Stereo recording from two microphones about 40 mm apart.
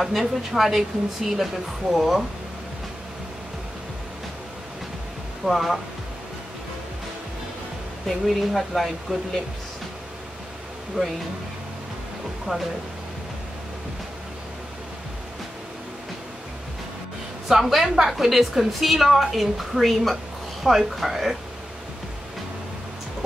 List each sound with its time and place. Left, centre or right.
0.0 s a woman's voice: centre
5.4 s a woman's voice: centre
8.1 s a woman's voice: centre
12.5 s speech: centre
17.5 s a woman's voice: centre